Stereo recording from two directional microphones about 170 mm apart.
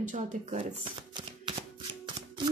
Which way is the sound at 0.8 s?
25° right (ahead or behind).